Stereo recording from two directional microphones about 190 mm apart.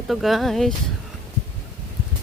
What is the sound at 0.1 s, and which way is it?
Speech, centre (ahead or behind).